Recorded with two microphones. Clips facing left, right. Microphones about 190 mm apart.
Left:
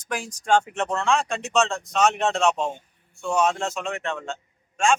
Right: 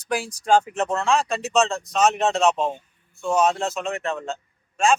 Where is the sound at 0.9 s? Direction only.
Centre (ahead or behind).